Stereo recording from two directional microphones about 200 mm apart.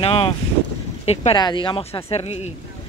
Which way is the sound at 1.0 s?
30° left (ahead or behind).